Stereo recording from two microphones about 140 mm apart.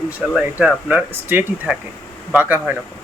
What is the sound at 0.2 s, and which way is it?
Speech, 5° right (ahead or behind).